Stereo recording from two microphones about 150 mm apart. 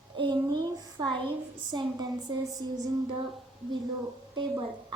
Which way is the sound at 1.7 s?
30° right (ahead or behind).